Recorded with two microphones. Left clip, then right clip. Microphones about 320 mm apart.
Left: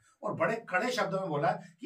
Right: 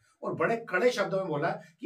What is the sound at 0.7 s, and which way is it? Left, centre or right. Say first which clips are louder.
Speech: right 5 dB; centre.